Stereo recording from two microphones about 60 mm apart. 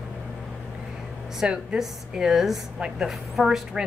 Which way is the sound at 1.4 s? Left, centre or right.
Centre.